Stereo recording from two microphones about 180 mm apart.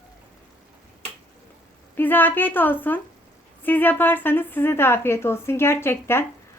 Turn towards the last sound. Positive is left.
turn(degrees=15)  # may be behind; listen again after turning